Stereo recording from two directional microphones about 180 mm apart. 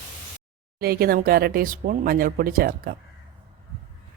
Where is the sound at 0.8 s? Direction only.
55° right (ahead or behind).